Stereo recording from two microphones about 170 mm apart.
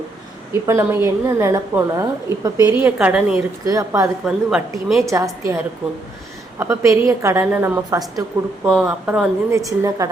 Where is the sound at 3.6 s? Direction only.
20° right (ahead or behind).